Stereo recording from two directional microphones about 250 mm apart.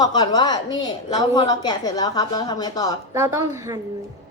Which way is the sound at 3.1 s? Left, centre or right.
Centre.